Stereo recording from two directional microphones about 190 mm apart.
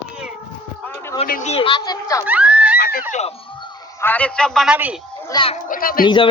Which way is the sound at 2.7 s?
55° left (ahead or behind).